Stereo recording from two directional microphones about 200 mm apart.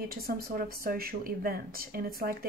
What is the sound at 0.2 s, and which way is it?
Speech, 50° right (ahead or behind).